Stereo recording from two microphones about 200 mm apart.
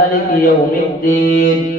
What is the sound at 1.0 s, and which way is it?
Mantra, 45° left (ahead or behind).